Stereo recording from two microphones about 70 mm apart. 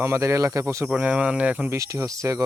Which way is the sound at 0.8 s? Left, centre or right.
Right.